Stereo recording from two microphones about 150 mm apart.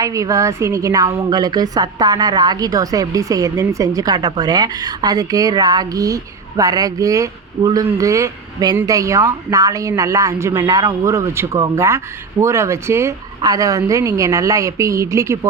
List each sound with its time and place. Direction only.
0.0 s a woman's voice: 20° right (ahead or behind)